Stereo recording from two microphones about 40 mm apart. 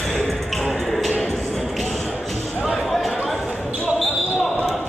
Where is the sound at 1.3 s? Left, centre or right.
Centre.